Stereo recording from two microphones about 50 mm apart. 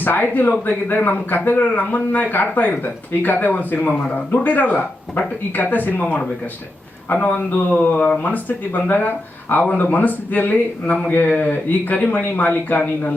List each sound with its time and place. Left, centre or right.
0.0 s a man's voice: left
8.2 s a man's voice: left